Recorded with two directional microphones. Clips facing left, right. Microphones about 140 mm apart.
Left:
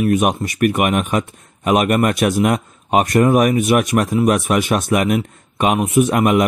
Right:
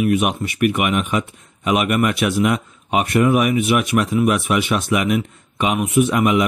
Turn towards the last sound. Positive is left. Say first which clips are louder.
# left 2 dB
turn(degrees=45)  # may be behind; listen again after turning